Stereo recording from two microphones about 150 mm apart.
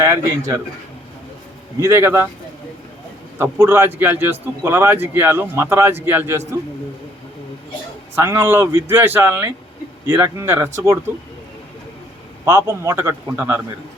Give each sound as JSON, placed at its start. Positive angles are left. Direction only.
{"t": 0.0, "sound": "a man's voice", "side_deg": -20}
{"t": 1.8, "sound": "a man's voice", "side_deg": -15}
{"t": 3.3, "sound": "a man's voice", "side_deg": -15}
{"t": 8.1, "sound": "a man's voice", "side_deg": -15}
{"t": 12.5, "sound": "a man's voice", "side_deg": -20}